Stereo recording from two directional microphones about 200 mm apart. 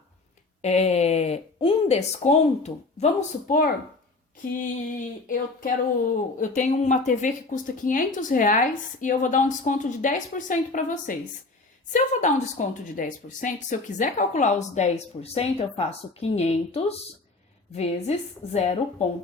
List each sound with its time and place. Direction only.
0.6 s speech: 35° left (ahead or behind)